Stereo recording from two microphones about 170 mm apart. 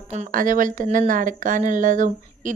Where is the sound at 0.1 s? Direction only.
50° right (ahead or behind).